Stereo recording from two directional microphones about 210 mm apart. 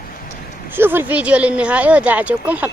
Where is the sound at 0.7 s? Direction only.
10° right (ahead or behind).